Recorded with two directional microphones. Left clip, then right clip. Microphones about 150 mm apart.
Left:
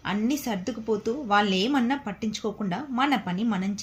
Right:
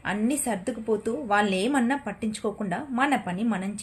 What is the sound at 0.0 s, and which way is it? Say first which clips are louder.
A woman's voice: right 1 dB; 15° right (ahead or behind).